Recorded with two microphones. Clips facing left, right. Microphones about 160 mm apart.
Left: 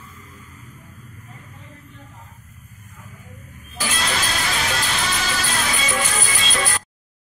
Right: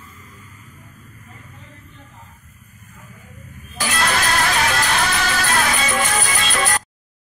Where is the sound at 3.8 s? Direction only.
65° right (ahead or behind).